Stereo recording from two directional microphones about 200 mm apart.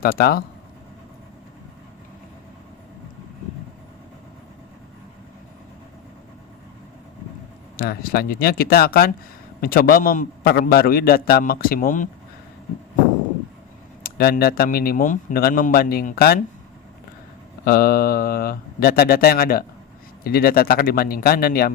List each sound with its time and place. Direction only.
0.0 s a man's voice: 50° left (ahead or behind)
7.8 s a man's voice: 50° left (ahead or behind)
14.0 s a man's voice: 50° left (ahead or behind)
17.7 s a man's voice: 50° left (ahead or behind)